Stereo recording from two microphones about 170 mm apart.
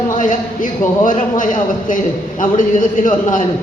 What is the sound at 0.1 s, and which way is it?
A man's voice, 50° left (ahead or behind).